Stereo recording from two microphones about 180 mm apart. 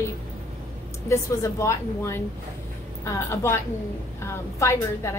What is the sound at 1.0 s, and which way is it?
A woman's voice, 15° left (ahead or behind).